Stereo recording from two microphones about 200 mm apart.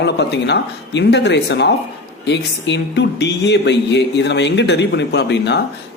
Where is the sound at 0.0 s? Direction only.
60° left (ahead or behind).